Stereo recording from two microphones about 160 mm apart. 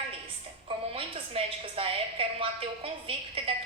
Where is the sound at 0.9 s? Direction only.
35° right (ahead or behind).